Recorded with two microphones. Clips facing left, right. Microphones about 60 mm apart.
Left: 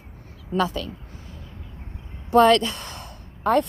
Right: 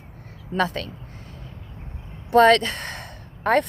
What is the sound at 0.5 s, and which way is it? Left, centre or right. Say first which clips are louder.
Speech: even; right.